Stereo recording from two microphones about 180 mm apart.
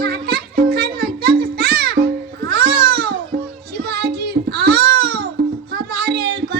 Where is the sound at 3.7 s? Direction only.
60° right (ahead or behind).